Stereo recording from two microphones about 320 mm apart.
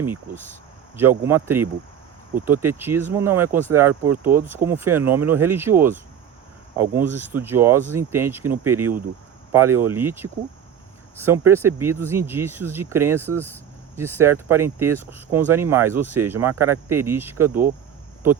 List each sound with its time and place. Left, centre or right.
1.2 s speech: centre